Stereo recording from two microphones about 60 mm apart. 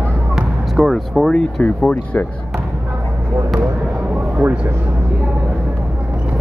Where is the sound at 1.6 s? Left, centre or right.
Left.